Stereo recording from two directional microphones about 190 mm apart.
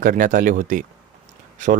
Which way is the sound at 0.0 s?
45° right (ahead or behind).